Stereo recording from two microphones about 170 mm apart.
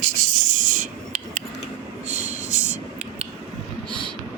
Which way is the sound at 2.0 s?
45° right (ahead or behind).